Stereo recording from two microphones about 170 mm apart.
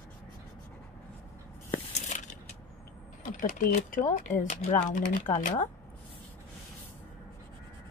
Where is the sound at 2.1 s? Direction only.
45° left (ahead or behind).